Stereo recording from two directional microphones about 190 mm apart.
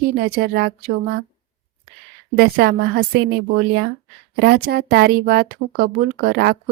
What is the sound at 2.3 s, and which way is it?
Speech, 55° right (ahead or behind).